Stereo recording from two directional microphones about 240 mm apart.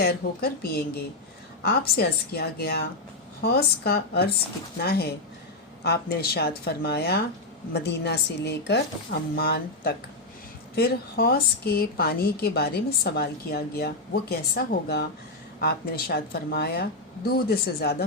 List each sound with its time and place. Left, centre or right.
0.0 s a woman's voice: left